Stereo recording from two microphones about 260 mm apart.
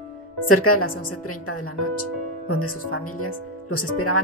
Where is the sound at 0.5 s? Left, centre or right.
Left.